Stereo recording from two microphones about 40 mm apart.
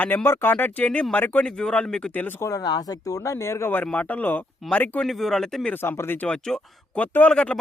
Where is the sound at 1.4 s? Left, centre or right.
Left.